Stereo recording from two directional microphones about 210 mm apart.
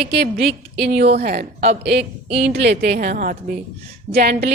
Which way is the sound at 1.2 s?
50° right (ahead or behind).